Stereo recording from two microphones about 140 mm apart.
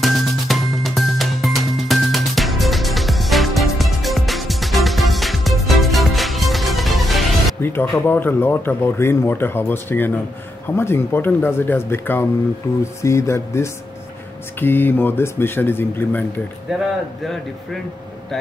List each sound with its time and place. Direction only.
0.0 s music: centre (ahead or behind)
7.6 s speech: 15° left (ahead or behind)